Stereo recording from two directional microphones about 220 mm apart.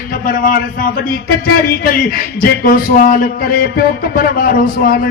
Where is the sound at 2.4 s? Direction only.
40° left (ahead or behind).